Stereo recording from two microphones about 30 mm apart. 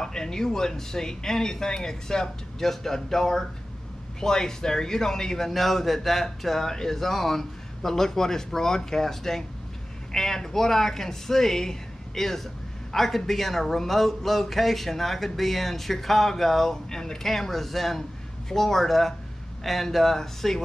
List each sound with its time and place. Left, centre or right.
0.0 s speech: left
5.5 s speech: centre